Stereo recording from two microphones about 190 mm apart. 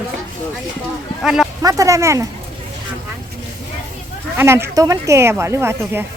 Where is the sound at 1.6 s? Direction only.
15° right (ahead or behind).